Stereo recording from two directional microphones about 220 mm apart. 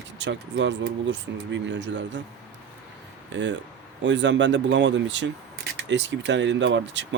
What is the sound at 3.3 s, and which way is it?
Speech, 55° right (ahead or behind).